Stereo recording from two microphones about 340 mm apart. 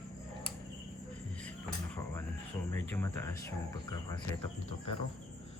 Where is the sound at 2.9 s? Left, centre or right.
Centre.